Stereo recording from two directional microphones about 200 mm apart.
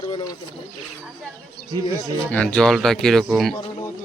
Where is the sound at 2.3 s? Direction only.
5° left (ahead or behind).